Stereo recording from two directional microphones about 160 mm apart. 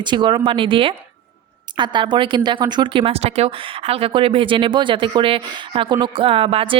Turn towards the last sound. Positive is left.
turn(degrees=-35)  # may be behind; listen again after turning